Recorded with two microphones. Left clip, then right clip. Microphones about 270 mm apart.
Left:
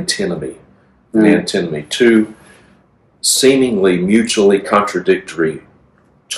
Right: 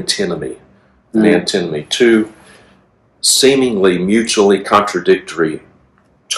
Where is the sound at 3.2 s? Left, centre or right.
Centre.